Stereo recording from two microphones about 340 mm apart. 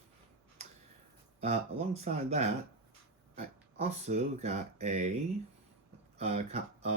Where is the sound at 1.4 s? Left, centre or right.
Centre.